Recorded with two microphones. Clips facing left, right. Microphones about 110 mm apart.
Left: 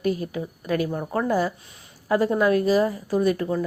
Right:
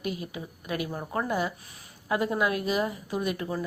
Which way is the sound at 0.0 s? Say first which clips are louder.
Left 8 dB; 40° left (ahead or behind).